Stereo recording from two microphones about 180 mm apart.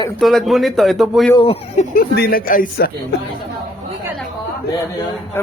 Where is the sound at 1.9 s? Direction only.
55° left (ahead or behind).